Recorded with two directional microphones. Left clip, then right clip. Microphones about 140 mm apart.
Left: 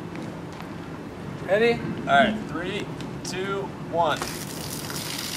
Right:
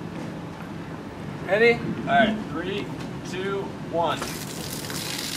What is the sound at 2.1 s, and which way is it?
Speech, 40° left (ahead or behind).